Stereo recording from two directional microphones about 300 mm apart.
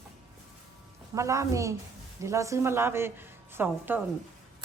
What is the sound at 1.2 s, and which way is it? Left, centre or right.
Speech, centre.